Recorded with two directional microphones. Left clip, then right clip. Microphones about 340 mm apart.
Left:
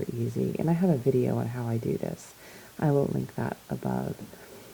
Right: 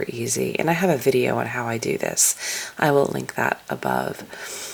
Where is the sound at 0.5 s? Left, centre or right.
Centre.